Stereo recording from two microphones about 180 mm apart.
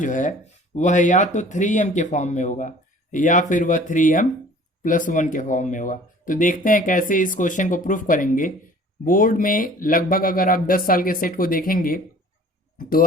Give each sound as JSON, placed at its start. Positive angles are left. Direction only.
{"t": 0.0, "sound": "speech", "side_deg": 45}